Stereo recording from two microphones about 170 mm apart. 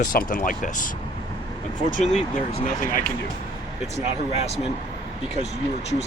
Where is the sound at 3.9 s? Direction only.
40° left (ahead or behind).